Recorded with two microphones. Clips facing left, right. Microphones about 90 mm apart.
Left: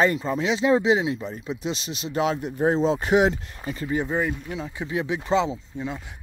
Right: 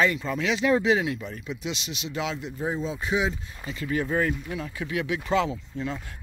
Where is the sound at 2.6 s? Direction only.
75° left (ahead or behind).